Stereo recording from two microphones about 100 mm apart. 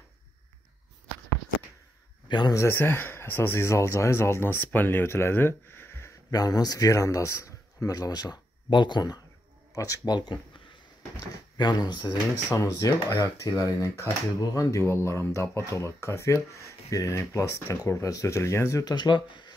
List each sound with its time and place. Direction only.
2.2 s speech: 45° left (ahead or behind)
2.5 s speech: 25° left (ahead or behind)
6.3 s speech: 40° left (ahead or behind)
11.5 s speech: 45° left (ahead or behind)
12.4 s speech: 30° left (ahead or behind)
18.9 s speech: 50° left (ahead or behind)